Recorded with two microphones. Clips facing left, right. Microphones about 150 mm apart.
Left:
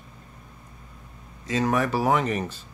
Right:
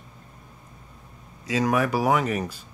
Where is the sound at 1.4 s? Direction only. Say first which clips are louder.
Right 1 dB; 10° right (ahead or behind).